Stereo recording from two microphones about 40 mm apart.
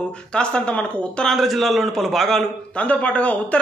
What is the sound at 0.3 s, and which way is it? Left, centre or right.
Speech, left.